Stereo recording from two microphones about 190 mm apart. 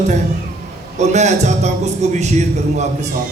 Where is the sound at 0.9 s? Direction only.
35° right (ahead or behind).